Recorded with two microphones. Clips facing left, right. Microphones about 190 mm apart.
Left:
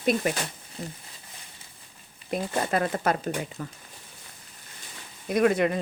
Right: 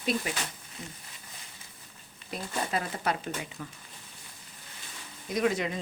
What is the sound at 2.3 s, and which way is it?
Speech, 55° left (ahead or behind).